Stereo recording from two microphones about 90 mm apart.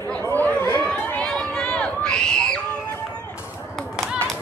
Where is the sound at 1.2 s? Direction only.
5° left (ahead or behind).